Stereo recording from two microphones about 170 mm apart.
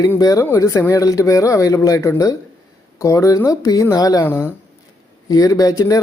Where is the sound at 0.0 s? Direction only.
20° left (ahead or behind).